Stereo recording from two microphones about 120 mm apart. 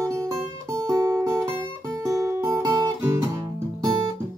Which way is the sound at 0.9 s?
25° right (ahead or behind).